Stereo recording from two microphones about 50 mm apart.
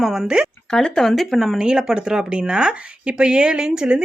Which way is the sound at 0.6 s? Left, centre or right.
Centre.